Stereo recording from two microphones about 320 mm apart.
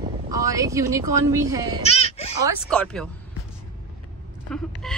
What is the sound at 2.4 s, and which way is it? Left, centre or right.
Speech, centre.